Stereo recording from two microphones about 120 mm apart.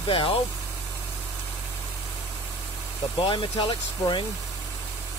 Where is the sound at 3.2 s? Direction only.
45° left (ahead or behind).